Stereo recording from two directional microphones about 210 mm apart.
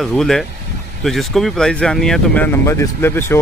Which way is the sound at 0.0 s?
Centre (ahead or behind).